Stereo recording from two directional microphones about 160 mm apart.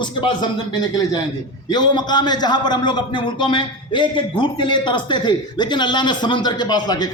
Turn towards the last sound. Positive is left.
turn(degrees=25)  # may be behind; listen again after turning